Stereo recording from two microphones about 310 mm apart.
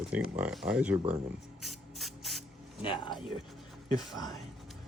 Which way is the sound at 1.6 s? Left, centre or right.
Centre.